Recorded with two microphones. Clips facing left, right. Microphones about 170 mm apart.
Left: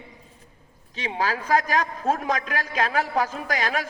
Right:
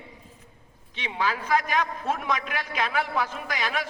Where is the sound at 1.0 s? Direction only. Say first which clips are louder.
Left 2 dB; 40° left (ahead or behind).